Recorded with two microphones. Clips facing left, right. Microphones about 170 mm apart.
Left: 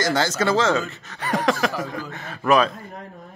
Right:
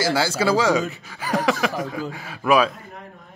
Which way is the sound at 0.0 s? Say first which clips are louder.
Right 1 dB; 10° right (ahead or behind).